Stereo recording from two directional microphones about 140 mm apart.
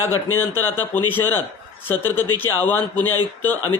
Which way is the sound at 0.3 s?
15° left (ahead or behind).